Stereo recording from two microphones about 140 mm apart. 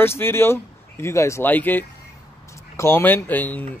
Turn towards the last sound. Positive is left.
turn(degrees=10)  # may be behind; listen again after turning